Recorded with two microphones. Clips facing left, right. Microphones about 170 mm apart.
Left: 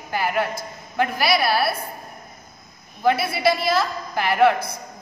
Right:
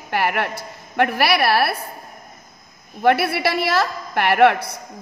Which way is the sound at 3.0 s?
65° right (ahead or behind).